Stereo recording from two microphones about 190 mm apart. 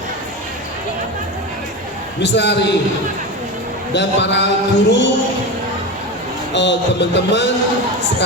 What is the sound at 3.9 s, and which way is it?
Speech, 65° left (ahead or behind).